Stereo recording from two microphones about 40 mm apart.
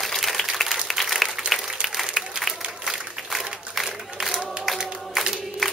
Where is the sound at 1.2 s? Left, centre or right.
Centre.